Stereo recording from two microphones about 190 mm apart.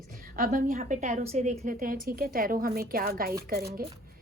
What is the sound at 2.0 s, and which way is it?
A woman's voice, 50° right (ahead or behind).